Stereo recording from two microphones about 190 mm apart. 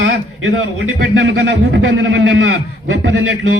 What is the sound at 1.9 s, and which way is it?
Speech, 80° right.